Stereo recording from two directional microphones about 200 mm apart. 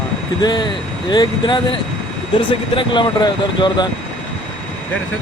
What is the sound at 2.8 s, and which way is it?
Speech, 25° left (ahead or behind).